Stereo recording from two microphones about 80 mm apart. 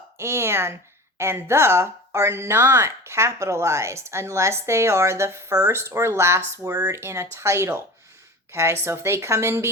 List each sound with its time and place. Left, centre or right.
0.2 s speech: right